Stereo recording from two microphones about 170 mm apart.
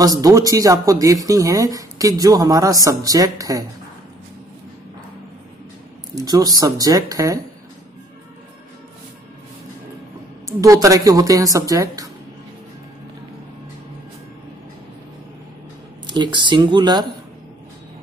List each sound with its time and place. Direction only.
0.0 s speech: 20° right (ahead or behind)
6.1 s speech: 20° right (ahead or behind)
10.6 s speech: 20° right (ahead or behind)
16.1 s speech: 25° right (ahead or behind)